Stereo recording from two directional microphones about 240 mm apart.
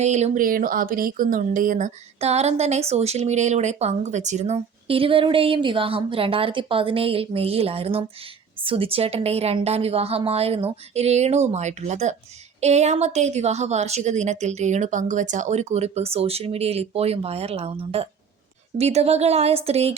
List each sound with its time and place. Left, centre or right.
0.0 s a woman's voice: right